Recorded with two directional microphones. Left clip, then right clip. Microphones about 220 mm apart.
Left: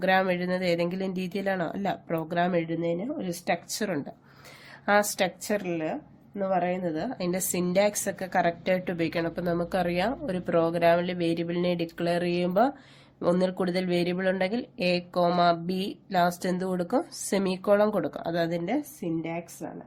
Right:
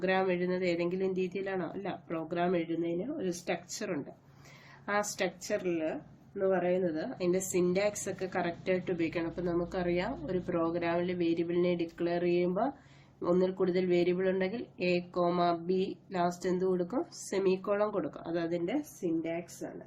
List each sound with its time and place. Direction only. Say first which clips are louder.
0.0 s a woman's voice: left 6 dB; 50° left (ahead or behind)